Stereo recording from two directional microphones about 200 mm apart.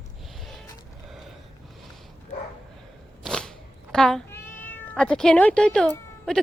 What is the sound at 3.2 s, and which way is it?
Cat, 5° left (ahead or behind).